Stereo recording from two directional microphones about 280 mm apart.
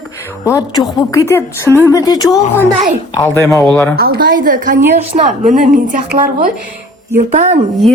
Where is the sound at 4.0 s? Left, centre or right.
Right.